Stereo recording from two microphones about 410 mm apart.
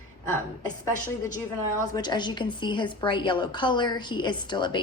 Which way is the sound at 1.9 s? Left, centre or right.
Centre.